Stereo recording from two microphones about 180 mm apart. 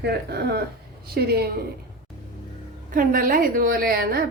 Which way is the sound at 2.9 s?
50° right (ahead or behind).